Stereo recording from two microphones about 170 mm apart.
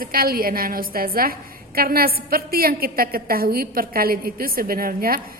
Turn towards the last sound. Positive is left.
turn(degrees=-60)  # may be behind; listen again after turning